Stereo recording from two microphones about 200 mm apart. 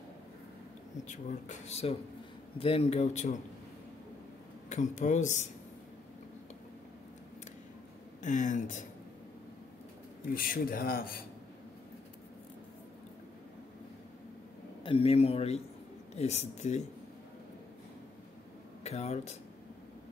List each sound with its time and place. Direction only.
1.7 s speech: 30° left (ahead or behind)
4.6 s speech: 35° left (ahead or behind)
8.2 s speech: 40° left (ahead or behind)
10.3 s speech: 45° left (ahead or behind)
14.8 s a man's voice: 25° left (ahead or behind)
18.9 s speech: 30° left (ahead or behind)